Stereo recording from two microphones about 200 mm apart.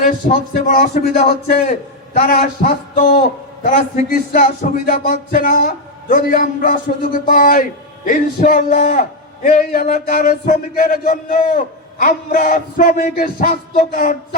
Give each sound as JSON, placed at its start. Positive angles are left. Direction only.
{"t": 0.0, "sound": "a man's voice", "side_deg": 45}